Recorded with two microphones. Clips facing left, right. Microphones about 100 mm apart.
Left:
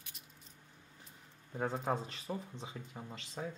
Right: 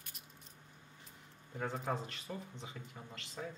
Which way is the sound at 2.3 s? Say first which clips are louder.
Left 6 dB; 25° left (ahead or behind).